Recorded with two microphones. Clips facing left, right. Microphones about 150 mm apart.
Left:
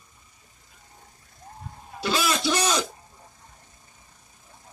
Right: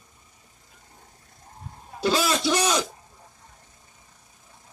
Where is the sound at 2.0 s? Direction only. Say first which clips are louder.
Right 3 dB; 30° right (ahead or behind).